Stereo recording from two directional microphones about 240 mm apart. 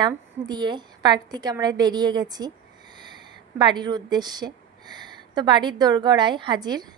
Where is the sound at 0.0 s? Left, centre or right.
Centre.